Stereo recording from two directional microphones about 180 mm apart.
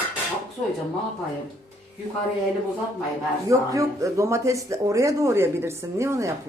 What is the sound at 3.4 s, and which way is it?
Speech, 20° right (ahead or behind).